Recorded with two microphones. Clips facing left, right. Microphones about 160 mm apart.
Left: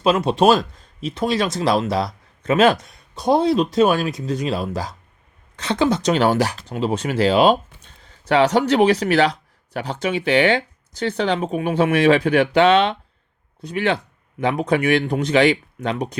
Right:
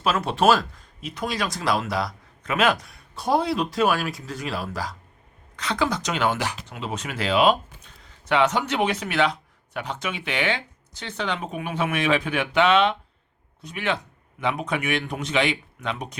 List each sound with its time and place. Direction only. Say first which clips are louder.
0.0 s speech: left 5 dB; 20° left (ahead or behind)